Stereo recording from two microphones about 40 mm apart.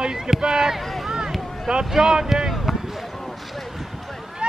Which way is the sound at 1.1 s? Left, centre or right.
Centre.